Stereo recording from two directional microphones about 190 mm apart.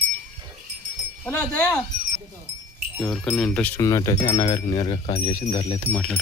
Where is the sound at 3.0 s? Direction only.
5° left (ahead or behind); by 5.9 s 25° left (ahead or behind).